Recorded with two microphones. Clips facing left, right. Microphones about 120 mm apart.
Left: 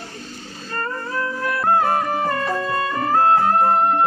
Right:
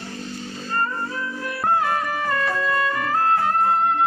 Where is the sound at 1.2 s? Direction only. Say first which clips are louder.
Left 5 dB; 60° left (ahead or behind).